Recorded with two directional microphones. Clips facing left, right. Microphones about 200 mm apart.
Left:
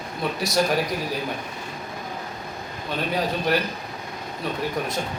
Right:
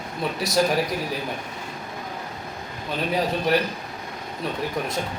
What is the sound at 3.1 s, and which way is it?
Speech, centre (ahead or behind).